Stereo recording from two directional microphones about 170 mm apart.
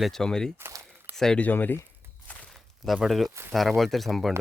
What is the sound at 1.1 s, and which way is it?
Speech, 5° left (ahead or behind).